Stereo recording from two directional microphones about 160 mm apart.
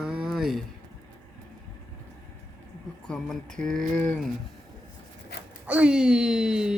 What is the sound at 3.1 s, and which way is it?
Speech, 5° left (ahead or behind).